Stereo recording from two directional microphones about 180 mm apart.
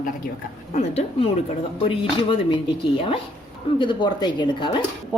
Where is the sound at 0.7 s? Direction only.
35° left (ahead or behind).